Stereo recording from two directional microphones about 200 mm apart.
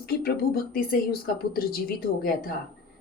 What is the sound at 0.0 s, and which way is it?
Speech, 50° left (ahead or behind).